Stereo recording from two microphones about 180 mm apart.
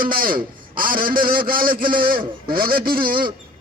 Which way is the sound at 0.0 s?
55° right (ahead or behind).